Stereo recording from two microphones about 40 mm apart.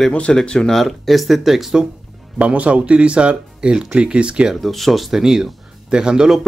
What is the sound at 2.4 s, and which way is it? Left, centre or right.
Speech, right.